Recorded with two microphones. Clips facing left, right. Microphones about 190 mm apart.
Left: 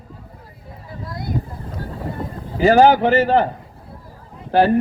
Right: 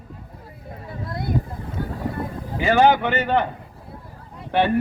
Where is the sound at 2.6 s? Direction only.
40° left (ahead or behind).